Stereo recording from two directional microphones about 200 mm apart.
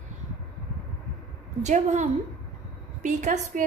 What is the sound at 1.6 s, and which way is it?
A woman's voice, 35° right (ahead or behind).